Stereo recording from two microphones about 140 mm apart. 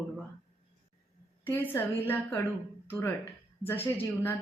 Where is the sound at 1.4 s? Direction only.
15° left (ahead or behind).